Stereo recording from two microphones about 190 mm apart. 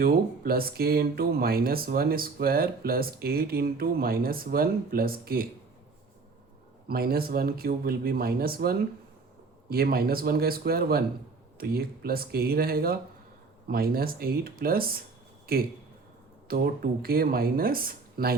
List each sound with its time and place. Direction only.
0.0 s speech: 50° right (ahead or behind)
6.8 s speech: 55° right (ahead or behind)